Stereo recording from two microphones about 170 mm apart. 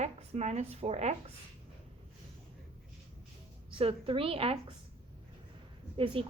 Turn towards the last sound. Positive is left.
turn(degrees=-30)  # may be behind; listen again after turning